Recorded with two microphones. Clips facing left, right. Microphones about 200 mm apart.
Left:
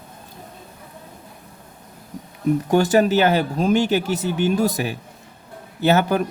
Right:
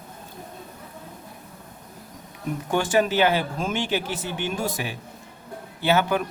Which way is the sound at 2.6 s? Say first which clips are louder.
Left 4 dB; 40° left (ahead or behind).